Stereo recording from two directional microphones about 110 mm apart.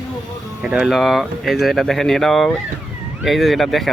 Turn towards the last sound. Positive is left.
turn(degrees=0)  # may be behind; listen again after turning